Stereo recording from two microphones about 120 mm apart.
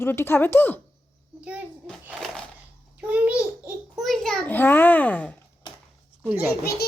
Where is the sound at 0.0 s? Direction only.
20° left (ahead or behind).